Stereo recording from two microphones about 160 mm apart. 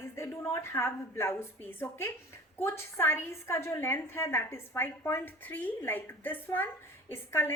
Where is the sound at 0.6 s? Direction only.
15° left (ahead or behind).